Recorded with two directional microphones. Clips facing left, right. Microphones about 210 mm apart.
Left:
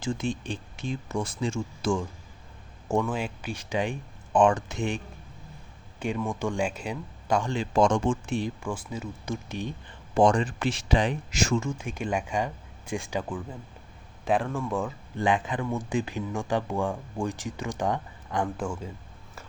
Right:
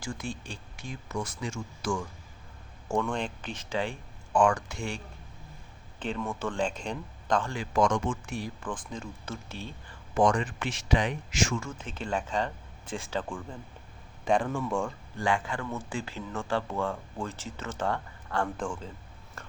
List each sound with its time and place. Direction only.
0.0 s speech: 25° left (ahead or behind)
2.9 s speech: 10° left (ahead or behind)
7.5 s speech: 25° left (ahead or behind)
8.6 s speech: 10° left (ahead or behind)
10.2 s speech: 30° left (ahead or behind)
11.5 s speech: 15° left (ahead or behind)
15.2 s speech: 20° left (ahead or behind)
19.4 s a sound: 5° left (ahead or behind)